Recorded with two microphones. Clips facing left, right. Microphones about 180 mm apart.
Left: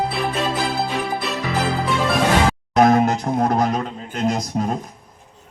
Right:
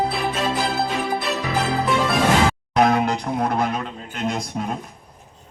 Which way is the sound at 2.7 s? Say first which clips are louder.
Left 4 dB; 45° left (ahead or behind).